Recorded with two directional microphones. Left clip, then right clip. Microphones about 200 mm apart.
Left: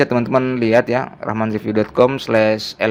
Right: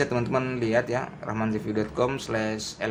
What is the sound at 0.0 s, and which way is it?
Speech, 40° left (ahead or behind).